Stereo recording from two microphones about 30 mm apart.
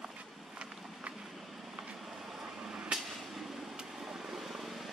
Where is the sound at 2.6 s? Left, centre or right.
Right.